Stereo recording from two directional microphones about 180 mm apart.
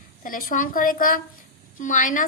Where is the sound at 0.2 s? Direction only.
50° left (ahead or behind).